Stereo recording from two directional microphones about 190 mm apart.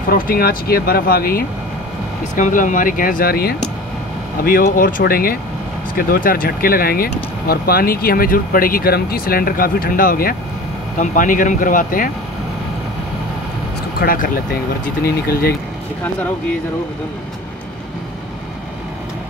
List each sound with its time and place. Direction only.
0.1 s speech: 50° left (ahead or behind)
13.9 s speech: 45° left (ahead or behind)